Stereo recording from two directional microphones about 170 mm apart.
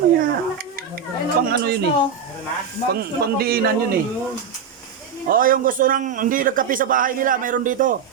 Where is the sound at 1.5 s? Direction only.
75° right (ahead or behind).